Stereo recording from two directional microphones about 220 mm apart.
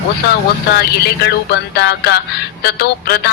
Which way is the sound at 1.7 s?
45° left (ahead or behind).